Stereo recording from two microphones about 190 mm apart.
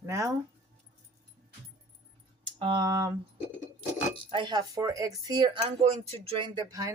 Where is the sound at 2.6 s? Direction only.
25° right (ahead or behind).